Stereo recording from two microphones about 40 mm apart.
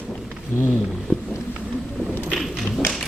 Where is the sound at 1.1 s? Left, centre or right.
Right.